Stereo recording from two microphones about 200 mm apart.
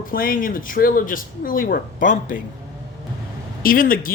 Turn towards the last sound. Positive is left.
turn(degrees=45)  # may be behind; listen again after turning